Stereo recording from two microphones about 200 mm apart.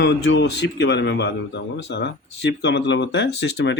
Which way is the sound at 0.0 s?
60° left (ahead or behind).